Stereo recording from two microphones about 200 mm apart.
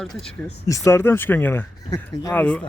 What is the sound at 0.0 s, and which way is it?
A man's voice, centre (ahead or behind).